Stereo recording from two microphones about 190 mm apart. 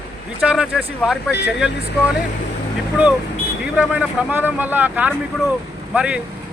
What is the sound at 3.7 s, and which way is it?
Speech, 5° right (ahead or behind).